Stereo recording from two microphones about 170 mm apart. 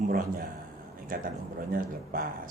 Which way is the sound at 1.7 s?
55° right (ahead or behind).